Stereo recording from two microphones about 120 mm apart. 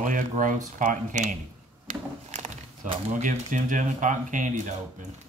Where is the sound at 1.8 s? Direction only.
90° right.